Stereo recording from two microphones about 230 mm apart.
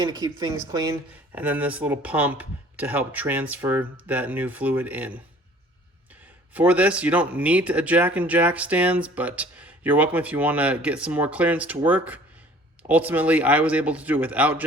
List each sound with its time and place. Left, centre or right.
0.0 s speech: centre
6.5 s speech: centre